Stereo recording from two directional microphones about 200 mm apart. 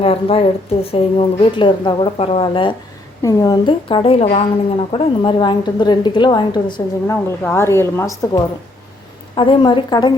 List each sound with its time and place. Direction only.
0.0 s a woman's voice: 30° left (ahead or behind)
9.3 s a woman's voice: 25° left (ahead or behind)